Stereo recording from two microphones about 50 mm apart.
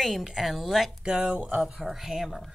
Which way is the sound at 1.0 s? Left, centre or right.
Centre.